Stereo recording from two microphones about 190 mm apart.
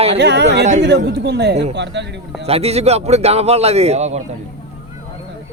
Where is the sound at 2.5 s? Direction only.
35° right (ahead or behind).